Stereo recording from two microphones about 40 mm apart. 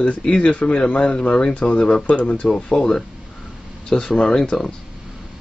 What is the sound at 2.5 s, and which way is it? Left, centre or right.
Speech, left.